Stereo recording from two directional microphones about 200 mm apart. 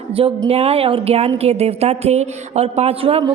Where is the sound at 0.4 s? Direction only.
30° right (ahead or behind).